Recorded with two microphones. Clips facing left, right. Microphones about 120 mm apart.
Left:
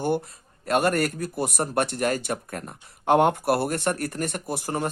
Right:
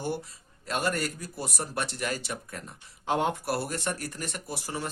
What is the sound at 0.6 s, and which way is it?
A man's voice, 55° left (ahead or behind).